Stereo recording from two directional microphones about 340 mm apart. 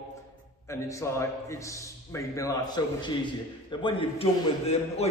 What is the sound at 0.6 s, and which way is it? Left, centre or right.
A man's voice, centre.